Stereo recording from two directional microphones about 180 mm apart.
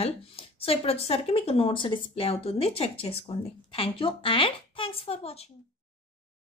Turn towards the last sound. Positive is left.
turn(degrees=35)  # may be behind; listen again after turning